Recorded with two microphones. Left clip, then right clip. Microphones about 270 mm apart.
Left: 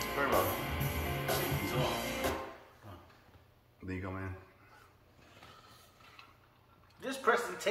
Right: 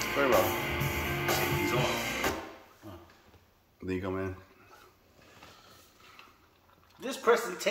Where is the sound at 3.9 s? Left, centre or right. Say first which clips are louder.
Right 8 dB; right.